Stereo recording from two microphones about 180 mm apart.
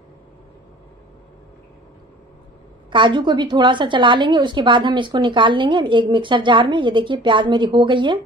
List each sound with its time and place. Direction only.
2.9 s a woman's voice: 25° right (ahead or behind)